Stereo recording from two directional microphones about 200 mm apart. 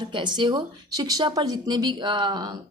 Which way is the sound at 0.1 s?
20° right (ahead or behind).